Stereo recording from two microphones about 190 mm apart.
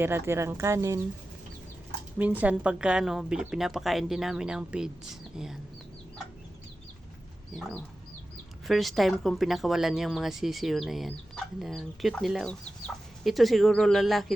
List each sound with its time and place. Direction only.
0.0 s speech: 10° right (ahead or behind)
2.1 s speech: 10° right (ahead or behind)
8.6 s speech: centre (ahead or behind)